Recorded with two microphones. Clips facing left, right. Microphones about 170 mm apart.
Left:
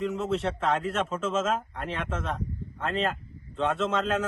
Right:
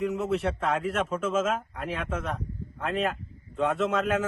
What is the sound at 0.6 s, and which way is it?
A man's voice, 5° right (ahead or behind).